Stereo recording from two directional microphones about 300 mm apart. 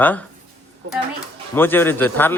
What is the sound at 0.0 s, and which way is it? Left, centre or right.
Speech, centre.